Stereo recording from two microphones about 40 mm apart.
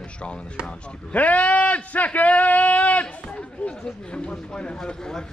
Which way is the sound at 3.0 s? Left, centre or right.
Left.